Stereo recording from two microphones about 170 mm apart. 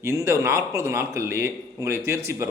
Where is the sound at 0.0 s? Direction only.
15° right (ahead or behind).